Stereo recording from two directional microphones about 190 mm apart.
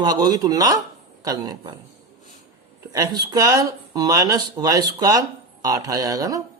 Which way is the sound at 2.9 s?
20° right (ahead or behind).